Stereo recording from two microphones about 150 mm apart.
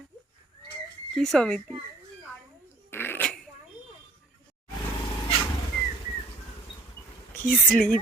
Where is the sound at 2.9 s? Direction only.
15° left (ahead or behind).